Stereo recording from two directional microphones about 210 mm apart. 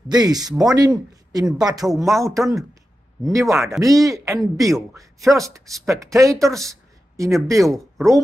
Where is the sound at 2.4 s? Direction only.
15° right (ahead or behind).